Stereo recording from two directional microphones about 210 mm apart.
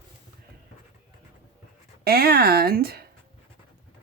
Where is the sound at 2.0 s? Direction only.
45° right (ahead or behind).